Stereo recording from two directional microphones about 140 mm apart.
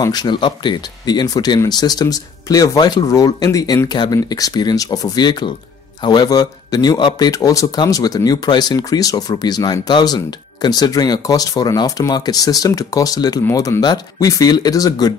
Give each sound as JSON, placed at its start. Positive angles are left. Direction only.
{"t": 0.0, "sound": "speech", "side_deg": 30}